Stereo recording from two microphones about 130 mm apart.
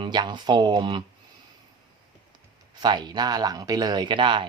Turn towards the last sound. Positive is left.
turn(degrees=-40)  # may be behind; listen again after turning